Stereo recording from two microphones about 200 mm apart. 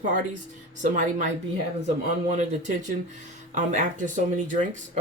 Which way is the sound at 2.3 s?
35° right (ahead or behind).